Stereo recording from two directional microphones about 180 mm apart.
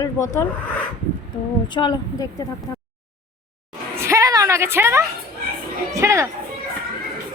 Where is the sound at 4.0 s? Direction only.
15° right (ahead or behind).